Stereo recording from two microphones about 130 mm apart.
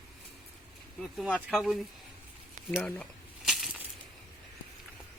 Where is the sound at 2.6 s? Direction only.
75° right (ahead or behind).